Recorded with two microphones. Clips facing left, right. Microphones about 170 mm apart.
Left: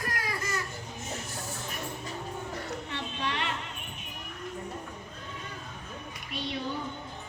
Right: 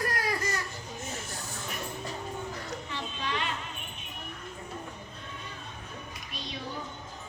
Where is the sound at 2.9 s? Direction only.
65° left (ahead or behind).